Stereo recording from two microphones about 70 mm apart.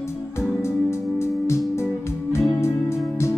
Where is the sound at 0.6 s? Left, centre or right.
Left.